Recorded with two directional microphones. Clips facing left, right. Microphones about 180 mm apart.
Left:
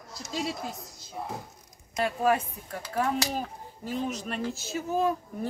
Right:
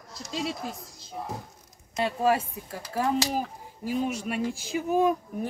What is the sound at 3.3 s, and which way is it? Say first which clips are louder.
Speech: right 3 dB; 10° right (ahead or behind).